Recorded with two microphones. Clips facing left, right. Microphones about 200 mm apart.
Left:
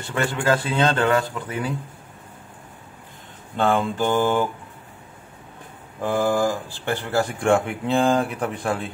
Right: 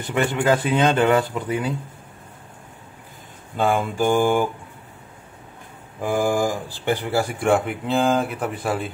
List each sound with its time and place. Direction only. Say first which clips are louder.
0.0 s speech: right 3 dB; 20° right (ahead or behind)
3.5 s speech: even; 10° right (ahead or behind)
5.9 s speech: even; 10° right (ahead or behind)